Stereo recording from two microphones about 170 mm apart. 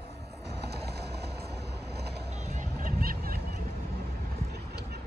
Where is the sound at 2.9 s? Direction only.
60° right (ahead or behind).